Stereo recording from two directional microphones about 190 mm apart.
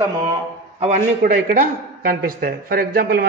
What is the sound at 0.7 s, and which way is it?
A man's voice, 35° right (ahead or behind).